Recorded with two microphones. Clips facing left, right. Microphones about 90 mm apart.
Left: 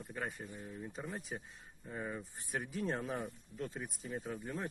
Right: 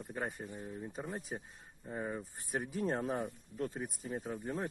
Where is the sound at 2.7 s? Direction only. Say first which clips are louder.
Right 3 dB; 45° right (ahead or behind).